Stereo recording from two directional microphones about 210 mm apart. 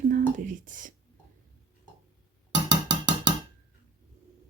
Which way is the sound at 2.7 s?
20° right (ahead or behind).